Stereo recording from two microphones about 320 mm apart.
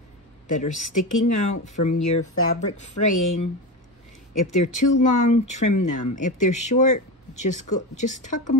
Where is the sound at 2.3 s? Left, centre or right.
Left.